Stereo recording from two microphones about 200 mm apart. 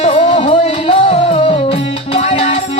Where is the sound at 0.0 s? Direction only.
30° left (ahead or behind).